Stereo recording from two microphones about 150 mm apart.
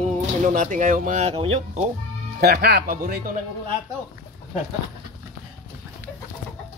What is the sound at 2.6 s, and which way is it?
Speech, 85° right.